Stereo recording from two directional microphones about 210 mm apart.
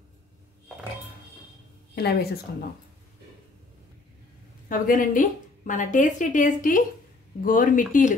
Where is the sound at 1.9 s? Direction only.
50° left (ahead or behind).